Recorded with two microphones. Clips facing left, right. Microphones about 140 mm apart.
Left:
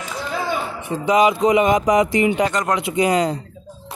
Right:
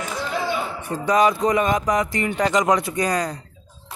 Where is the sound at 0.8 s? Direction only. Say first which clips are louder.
Left 2 dB; 20° left (ahead or behind).